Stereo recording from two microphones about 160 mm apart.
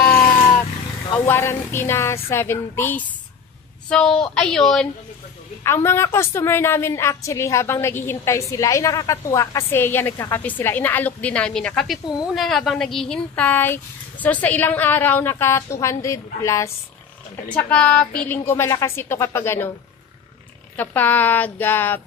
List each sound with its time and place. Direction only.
1.2 s a woman's voice: 15° left (ahead or behind)
5.6 s a woman's voice: 15° left (ahead or behind)
20.7 s a woman's voice: 10° left (ahead or behind)